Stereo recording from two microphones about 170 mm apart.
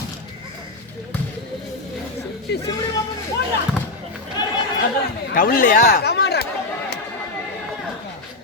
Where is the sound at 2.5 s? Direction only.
75° left (ahead or behind).